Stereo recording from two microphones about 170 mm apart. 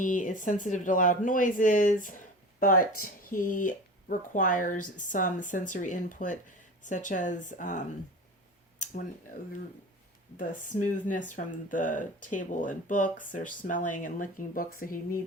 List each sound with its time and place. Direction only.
0.0 s speech: 50° left (ahead or behind)
10.3 s speech: 50° left (ahead or behind)